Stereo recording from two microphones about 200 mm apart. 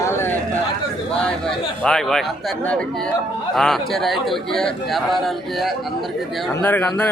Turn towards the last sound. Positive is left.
turn(degrees=10)  # may be behind; listen again after turning